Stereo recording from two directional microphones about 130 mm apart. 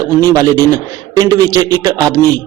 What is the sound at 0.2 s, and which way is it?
A man's voice, 30° right (ahead or behind).